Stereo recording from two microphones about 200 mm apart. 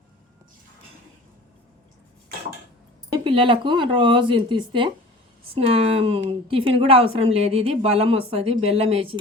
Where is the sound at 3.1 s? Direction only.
25° right (ahead or behind).